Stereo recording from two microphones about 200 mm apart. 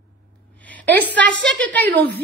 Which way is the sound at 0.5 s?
10° left (ahead or behind).